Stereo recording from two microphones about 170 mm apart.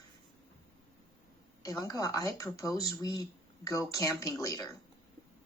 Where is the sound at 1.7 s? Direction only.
20° left (ahead or behind).